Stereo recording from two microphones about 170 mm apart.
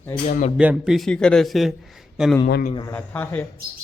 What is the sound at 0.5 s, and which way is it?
A man's voice, 5° right (ahead or behind).